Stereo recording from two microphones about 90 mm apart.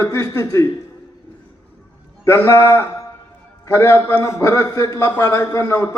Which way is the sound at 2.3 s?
30° left (ahead or behind).